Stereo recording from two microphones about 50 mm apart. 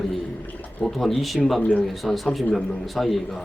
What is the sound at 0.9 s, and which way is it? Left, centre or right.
Speech, centre.